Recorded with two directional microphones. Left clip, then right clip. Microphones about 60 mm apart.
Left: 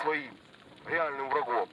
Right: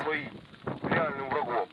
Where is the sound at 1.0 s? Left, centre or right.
Left.